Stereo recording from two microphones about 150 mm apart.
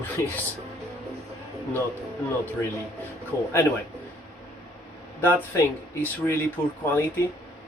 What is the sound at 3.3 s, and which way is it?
Speech, 15° left (ahead or behind).